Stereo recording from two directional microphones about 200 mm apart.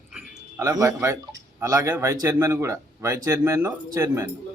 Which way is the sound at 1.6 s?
15° right (ahead or behind).